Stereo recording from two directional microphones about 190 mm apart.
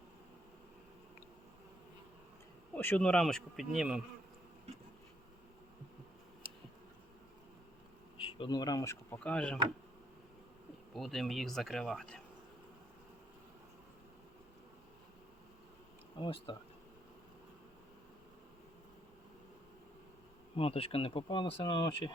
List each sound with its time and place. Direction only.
2.7 s speech: 10° left (ahead or behind)
8.2 s speech: 25° left (ahead or behind); by 9.6 s 5° left (ahead or behind)
10.9 s speech: centre (ahead or behind)
16.1 s speech: 25° left (ahead or behind)
20.6 s speech: 30° left (ahead or behind)